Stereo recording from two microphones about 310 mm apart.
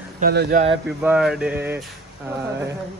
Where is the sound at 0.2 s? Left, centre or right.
Right.